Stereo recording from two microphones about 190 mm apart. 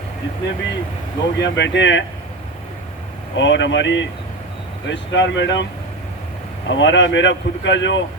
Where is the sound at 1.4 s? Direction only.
70° left (ahead or behind).